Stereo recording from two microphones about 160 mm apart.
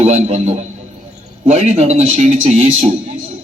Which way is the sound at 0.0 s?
40° right (ahead or behind).